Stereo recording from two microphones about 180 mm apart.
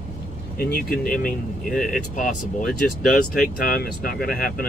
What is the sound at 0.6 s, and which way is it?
Speech, 55° left (ahead or behind).